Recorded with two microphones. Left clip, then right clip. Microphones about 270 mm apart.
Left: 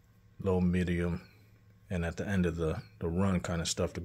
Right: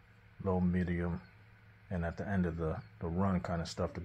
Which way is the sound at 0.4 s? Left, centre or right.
Left.